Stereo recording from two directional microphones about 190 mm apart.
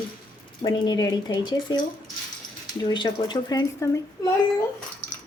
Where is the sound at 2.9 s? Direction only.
25° left (ahead or behind).